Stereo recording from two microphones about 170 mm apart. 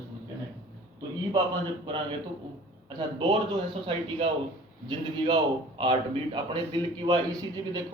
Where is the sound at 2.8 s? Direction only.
25° right (ahead or behind).